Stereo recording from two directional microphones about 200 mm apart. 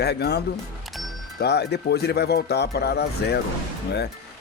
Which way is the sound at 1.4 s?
55° left (ahead or behind).